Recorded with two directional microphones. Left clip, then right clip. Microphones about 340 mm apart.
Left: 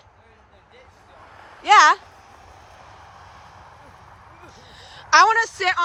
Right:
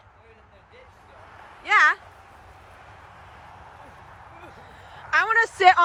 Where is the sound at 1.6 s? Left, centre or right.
Centre.